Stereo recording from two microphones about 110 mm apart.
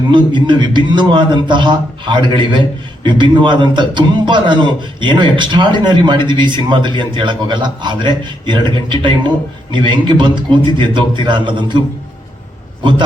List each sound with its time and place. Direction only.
0.1 s a man's voice: 45° right (ahead or behind)